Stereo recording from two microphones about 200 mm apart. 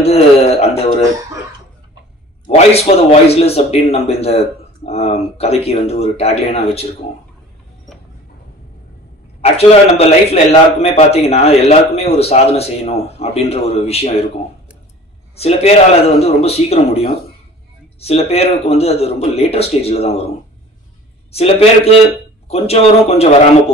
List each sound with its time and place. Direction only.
0.0 s speech: 30° left (ahead or behind)
2.4 s a man's voice: 30° left (ahead or behind)
9.4 s a man's voice: 30° left (ahead or behind)
15.3 s a man's voice: 30° left (ahead or behind)
18.0 s a man's voice: 30° left (ahead or behind)
21.3 s a man's voice: 30° left (ahead or behind)